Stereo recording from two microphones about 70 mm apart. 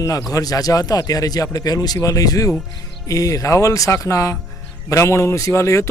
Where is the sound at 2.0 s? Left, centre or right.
Left.